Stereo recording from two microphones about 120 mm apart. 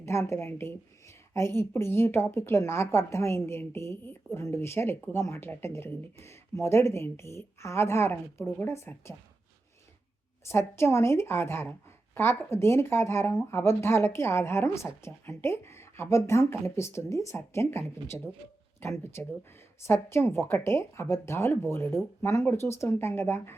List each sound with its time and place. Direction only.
0.0 s a woman's voice: 20° left (ahead or behind)
10.5 s a woman's voice: 20° left (ahead or behind)